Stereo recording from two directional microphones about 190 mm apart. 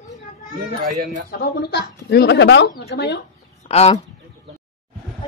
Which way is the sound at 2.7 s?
55° left (ahead or behind).